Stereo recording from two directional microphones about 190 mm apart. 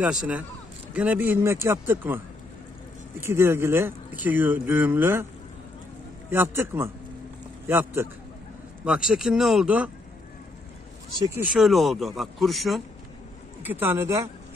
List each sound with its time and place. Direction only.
0.9 s speech: 5° right (ahead or behind)
6.3 s speech: 10° right (ahead or behind)
11.2 s speech: 10° right (ahead or behind)
11.6 s speech: centre (ahead or behind)
13.6 s speech: 10° right (ahead or behind)